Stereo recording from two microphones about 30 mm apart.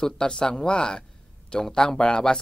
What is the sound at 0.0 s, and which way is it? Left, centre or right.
Speech, left.